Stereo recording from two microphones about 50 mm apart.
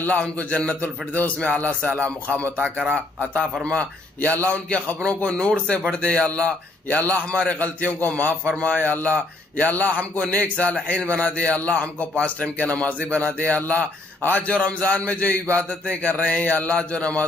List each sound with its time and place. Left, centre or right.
0.0 s a man's voice: left